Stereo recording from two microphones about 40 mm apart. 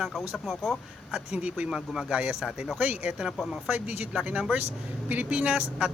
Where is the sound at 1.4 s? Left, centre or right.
Right.